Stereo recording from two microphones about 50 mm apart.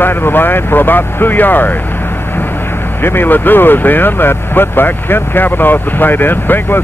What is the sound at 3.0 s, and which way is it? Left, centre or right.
Speech, left.